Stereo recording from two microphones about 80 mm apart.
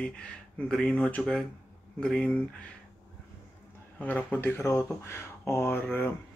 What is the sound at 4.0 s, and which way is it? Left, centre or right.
Speech, centre.